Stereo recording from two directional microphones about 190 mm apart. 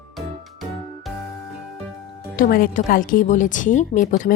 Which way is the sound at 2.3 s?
50° left (ahead or behind).